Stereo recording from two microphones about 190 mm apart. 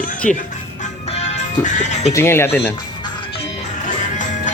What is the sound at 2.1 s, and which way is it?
Speech, 15° left (ahead or behind).